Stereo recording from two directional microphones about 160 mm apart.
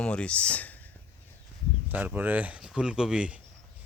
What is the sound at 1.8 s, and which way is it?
Speech, 10° right (ahead or behind).